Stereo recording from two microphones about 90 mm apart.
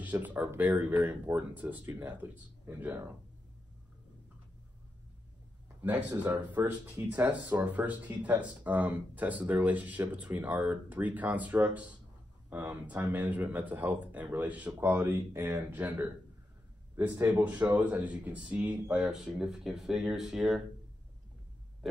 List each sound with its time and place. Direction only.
0.0 s speech: 15° right (ahead or behind)
5.8 s speech: 20° right (ahead or behind)